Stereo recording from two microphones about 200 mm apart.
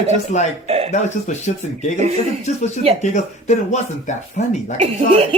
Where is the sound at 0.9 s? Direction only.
35° left (ahead or behind).